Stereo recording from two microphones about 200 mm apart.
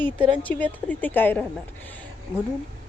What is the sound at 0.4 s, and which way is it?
A woman's voice, 10° left (ahead or behind).